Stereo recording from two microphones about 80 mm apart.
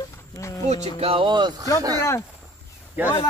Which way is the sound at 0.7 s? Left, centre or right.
Left.